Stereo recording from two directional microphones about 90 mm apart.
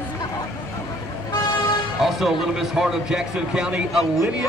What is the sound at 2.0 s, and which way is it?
Music, centre (ahead or behind).